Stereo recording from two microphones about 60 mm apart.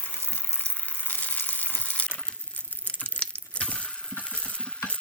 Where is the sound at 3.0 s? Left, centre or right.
Centre.